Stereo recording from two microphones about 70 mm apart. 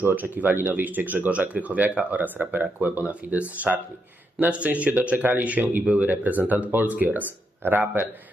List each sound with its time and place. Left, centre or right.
0.0 s speech: right